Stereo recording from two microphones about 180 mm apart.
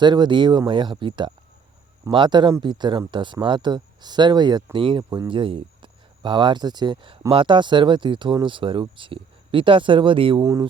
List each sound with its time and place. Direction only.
0.0 s speech: 25° right (ahead or behind)